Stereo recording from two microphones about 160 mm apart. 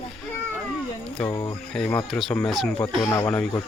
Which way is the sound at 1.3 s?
25° left (ahead or behind).